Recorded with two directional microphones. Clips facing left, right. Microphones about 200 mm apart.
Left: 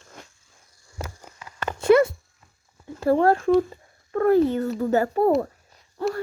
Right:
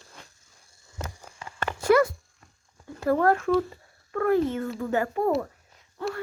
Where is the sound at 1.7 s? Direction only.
25° left (ahead or behind).